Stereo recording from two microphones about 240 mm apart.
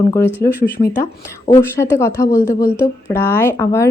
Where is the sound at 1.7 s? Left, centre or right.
Centre.